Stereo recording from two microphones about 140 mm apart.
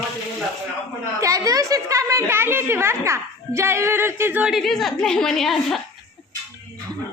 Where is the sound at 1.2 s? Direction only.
25° right (ahead or behind); by 5.8 s centre (ahead or behind).